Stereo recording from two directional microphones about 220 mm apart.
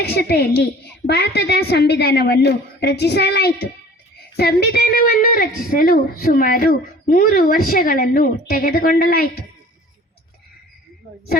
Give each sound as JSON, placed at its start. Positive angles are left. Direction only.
{"t": 0.0, "sound": "a woman's voice", "side_deg": 50}